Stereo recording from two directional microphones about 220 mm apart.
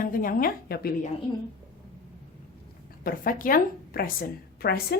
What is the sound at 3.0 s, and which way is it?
A woman's voice, 40° left (ahead or behind).